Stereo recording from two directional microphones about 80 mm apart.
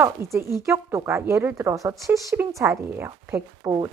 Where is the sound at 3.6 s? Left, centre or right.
Right.